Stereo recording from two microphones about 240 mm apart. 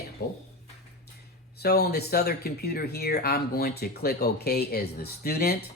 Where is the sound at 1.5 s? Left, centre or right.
Left.